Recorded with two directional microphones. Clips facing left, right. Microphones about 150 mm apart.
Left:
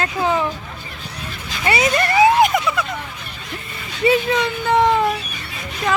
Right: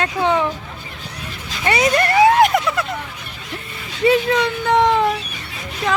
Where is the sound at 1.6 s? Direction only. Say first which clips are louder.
Right 1 dB; 5° left (ahead or behind).